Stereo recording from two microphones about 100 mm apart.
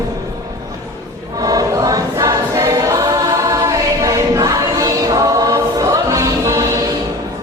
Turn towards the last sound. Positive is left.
turn(degrees=-30)  # may be behind; listen again after turning